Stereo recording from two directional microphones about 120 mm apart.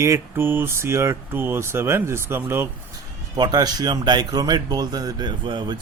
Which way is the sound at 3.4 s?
35° right (ahead or behind).